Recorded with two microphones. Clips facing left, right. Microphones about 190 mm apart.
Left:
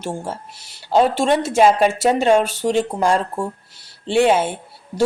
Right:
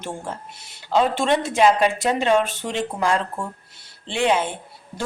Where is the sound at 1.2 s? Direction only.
45° left (ahead or behind).